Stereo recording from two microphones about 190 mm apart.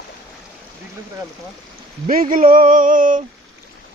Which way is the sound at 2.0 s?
45° right (ahead or behind).